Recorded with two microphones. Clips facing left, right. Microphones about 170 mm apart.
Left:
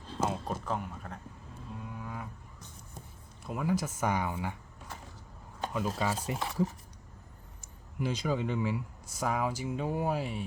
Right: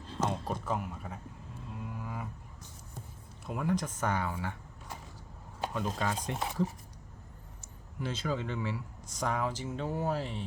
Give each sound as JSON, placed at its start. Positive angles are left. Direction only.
{"t": 0.2, "sound": "a sound", "side_deg": 5}
{"t": 3.4, "sound": "speech", "side_deg": 0}
{"t": 5.7, "sound": "speech", "side_deg": 5}
{"t": 7.9, "sound": "speech", "side_deg": 15}